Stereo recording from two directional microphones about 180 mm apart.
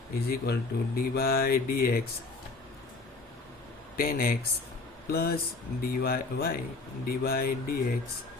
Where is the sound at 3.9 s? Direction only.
55° left (ahead or behind).